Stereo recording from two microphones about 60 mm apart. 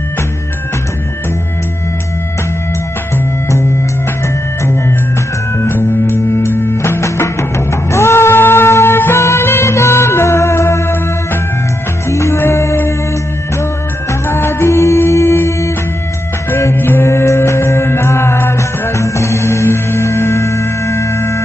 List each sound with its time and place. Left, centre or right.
5.6 s music: left
12.1 s music: left
14.3 s music: left
17.0 s music: left